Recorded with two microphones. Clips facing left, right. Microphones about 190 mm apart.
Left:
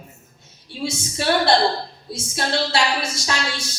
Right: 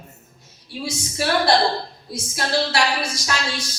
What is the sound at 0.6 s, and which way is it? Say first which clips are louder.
A woman's voice: left 2 dB; 25° left (ahead or behind).